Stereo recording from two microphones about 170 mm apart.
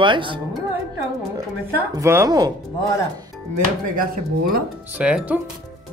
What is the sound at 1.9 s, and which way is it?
Speech, 20° right (ahead or behind).